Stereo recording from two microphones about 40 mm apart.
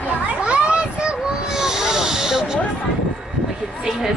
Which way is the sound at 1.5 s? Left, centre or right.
Centre.